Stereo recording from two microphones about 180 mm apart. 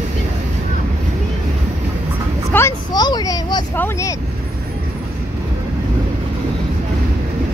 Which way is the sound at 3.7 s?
10° left (ahead or behind).